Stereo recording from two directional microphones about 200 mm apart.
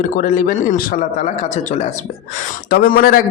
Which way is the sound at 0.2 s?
45° left (ahead or behind).